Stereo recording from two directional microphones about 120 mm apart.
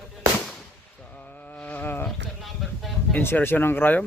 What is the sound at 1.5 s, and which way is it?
Insect, 15° left (ahead or behind).